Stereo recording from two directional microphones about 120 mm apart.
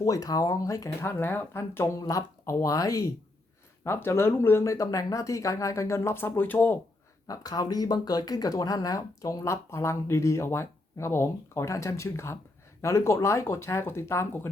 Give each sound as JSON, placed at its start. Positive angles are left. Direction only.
{"t": 0.0, "sound": "speech", "side_deg": 30}
{"t": 7.3, "sound": "speech", "side_deg": 30}